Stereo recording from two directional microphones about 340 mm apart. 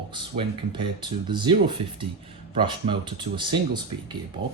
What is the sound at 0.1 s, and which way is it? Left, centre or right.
Speech, centre.